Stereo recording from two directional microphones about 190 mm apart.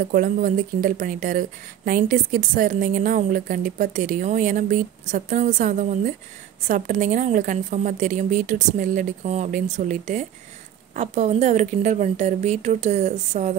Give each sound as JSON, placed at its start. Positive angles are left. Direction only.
{"t": 0.0, "sound": "a woman's voice", "side_deg": -45}